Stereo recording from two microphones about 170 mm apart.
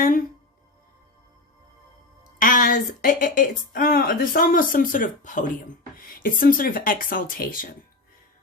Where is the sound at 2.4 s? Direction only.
50° left (ahead or behind).